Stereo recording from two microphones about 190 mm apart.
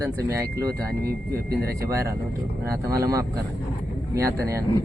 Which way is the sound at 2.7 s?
15° right (ahead or behind).